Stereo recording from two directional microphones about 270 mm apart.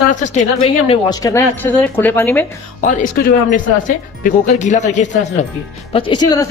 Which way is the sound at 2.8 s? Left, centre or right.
Left.